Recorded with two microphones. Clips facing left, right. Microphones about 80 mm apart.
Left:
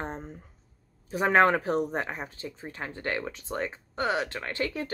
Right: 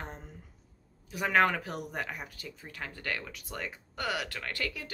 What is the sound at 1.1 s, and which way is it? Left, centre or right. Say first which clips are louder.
Speech: left 5 dB; left.